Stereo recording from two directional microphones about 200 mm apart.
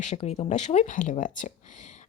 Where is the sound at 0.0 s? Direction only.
35° left (ahead or behind).